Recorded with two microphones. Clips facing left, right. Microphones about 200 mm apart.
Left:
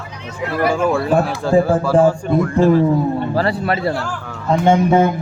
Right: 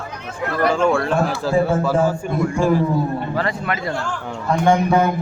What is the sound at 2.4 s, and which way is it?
Speech, 10° right (ahead or behind).